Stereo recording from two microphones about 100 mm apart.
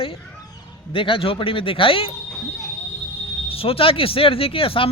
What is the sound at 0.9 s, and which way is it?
Speech, 60° left (ahead or behind).